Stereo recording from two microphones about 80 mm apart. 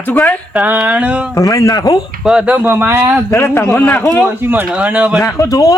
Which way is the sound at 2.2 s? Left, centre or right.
Centre.